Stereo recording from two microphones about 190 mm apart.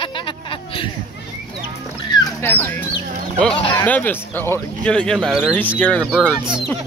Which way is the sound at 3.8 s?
10° left (ahead or behind).